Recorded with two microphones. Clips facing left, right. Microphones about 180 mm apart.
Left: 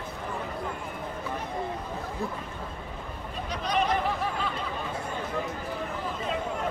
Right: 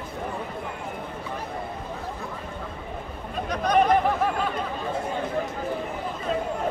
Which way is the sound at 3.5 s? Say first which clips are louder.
Right 7 dB; 50° right (ahead or behind).